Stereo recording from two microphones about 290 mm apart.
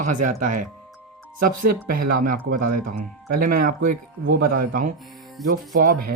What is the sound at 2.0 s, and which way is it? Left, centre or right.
Speech, right.